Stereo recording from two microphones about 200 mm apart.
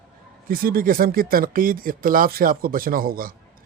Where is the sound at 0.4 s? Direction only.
45° right (ahead or behind).